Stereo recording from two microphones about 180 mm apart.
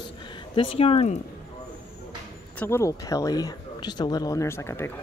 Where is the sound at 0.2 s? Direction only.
25° left (ahead or behind).